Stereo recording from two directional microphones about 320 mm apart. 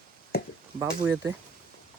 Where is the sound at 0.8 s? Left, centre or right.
Centre.